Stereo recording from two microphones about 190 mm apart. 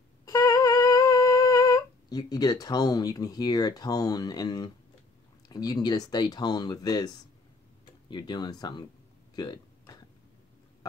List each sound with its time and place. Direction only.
0.2 s humming: 15° left (ahead or behind)
5.5 s speech: 20° left (ahead or behind)
8.1 s speech: 20° left (ahead or behind)
9.3 s hiccup: 20° left (ahead or behind)